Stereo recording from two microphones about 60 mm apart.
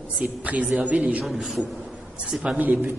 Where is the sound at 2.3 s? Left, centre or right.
Centre.